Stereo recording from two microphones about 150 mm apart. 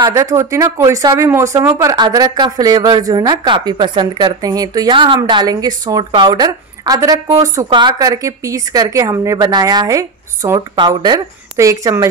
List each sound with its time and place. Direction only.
0.0 s a woman's voice: 20° right (ahead or behind)